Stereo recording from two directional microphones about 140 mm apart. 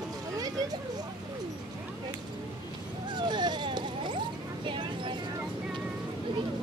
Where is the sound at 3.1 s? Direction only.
30° right (ahead or behind).